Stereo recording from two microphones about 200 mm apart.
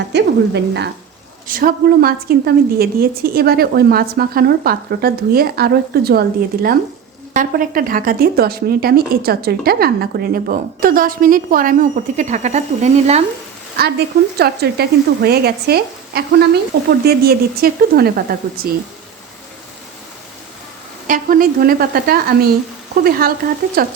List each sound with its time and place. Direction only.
0.1 s frying: 60° right (ahead or behind)
1.5 s speech: 45° right (ahead or behind)
14.3 s speech: 55° right (ahead or behind)
21.1 s speech: 45° right (ahead or behind)